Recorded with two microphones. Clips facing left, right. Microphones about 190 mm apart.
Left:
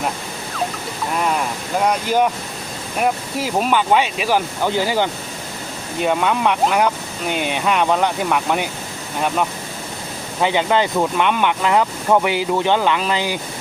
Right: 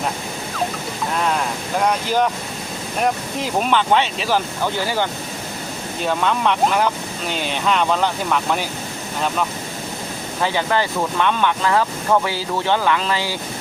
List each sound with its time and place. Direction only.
1.8 s speech: 10° left (ahead or behind)
6.1 s speech: 10° left (ahead or behind)
7.3 s speech: 55° left (ahead or behind)
7.5 s speech: 10° left (ahead or behind)
10.4 s speech: 20° left (ahead or behind)